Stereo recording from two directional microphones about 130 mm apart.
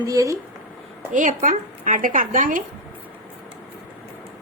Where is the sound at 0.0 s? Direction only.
25° right (ahead or behind).